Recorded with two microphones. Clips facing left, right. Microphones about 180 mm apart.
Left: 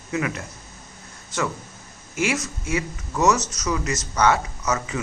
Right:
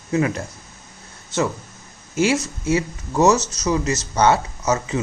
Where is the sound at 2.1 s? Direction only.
30° right (ahead or behind).